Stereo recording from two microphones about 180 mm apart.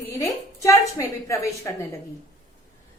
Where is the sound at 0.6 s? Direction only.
15° left (ahead or behind).